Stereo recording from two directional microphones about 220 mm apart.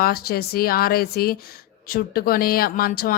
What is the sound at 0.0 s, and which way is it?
A woman's voice, 45° left (ahead or behind).